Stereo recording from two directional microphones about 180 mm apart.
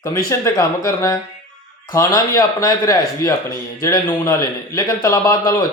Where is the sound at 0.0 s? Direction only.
15° left (ahead or behind).